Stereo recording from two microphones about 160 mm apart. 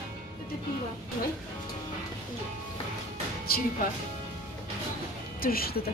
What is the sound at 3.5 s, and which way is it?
Speech, 70° left (ahead or behind).